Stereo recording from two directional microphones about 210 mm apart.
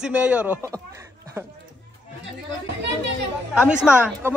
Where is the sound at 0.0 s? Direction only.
5° right (ahead or behind).